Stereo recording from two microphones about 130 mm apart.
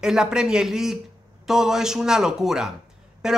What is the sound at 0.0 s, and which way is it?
A woman's voice, 5° right (ahead or behind).